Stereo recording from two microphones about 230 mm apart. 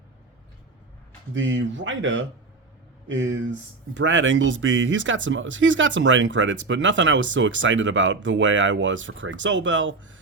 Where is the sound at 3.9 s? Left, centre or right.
Right.